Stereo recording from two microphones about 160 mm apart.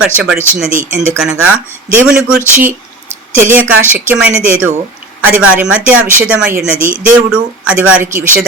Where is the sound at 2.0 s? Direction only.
5° right (ahead or behind).